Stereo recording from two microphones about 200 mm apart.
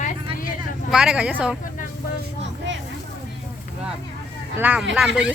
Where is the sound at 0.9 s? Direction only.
5° right (ahead or behind).